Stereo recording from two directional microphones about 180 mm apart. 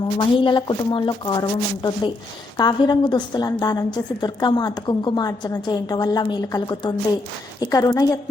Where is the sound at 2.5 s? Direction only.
20° left (ahead or behind).